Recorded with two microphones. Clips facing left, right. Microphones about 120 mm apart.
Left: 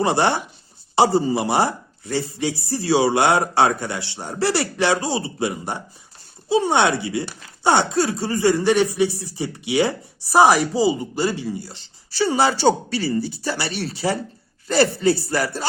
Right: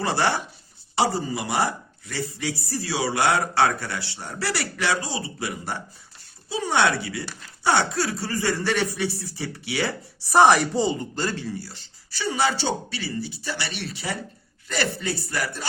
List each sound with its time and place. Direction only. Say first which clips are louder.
0.0 s speech: left 5 dB; 20° left (ahead or behind)
10.3 s speech: left 2 dB; 5° left (ahead or behind); by 15.6 s 35° left (ahead or behind)